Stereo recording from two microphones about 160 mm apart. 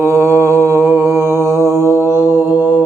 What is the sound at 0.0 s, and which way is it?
Mantra, 20° right (ahead or behind).